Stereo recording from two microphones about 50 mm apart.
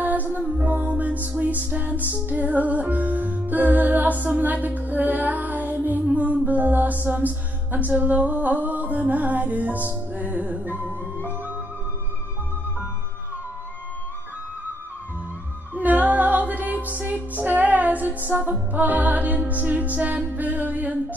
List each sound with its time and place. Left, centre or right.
0.0 s music: right
15.7 s music: right